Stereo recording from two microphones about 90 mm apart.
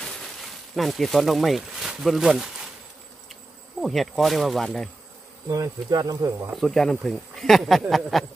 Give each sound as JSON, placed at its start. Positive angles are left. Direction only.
{"t": 0.0, "sound": "a sound", "side_deg": 5}
{"t": 3.8, "sound": "speech", "side_deg": 0}
{"t": 5.5, "sound": "speech", "side_deg": -45}
{"t": 6.5, "sound": "speech", "side_deg": 5}